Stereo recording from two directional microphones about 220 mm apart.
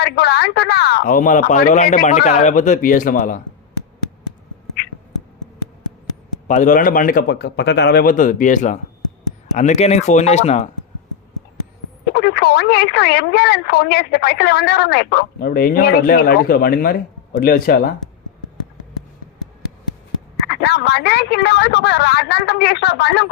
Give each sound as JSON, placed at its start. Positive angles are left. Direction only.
{"t": 0.0, "sound": "speech", "side_deg": 45}
{"t": 6.5, "sound": "speech", "side_deg": 35}
{"t": 12.1, "sound": "speech", "side_deg": 45}
{"t": 20.5, "sound": "speech", "side_deg": 50}